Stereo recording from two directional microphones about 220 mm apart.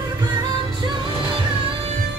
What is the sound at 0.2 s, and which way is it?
Music, 20° right (ahead or behind).